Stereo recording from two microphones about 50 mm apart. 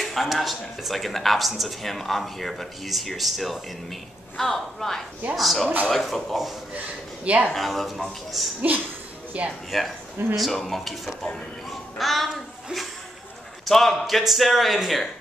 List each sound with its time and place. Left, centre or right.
0.0 s speech: centre
7.2 s speech: right
7.5 s speech: centre
8.7 s speech: right
9.7 s a child's voice: centre
13.7 s speech: centre